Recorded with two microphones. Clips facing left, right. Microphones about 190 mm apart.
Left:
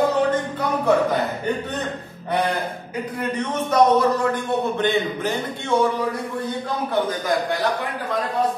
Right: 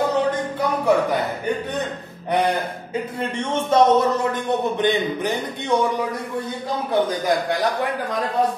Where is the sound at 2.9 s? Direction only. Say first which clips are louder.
Right 1 dB; 25° right (ahead or behind).